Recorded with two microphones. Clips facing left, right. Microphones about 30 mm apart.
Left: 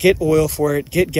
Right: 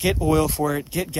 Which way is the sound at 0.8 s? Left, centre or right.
Centre.